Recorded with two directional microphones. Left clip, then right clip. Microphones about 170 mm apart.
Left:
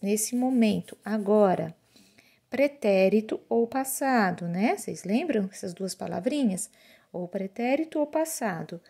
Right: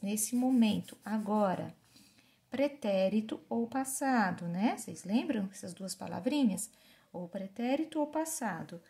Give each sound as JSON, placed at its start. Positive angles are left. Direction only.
{"t": 0.0, "sound": "speech", "side_deg": 40}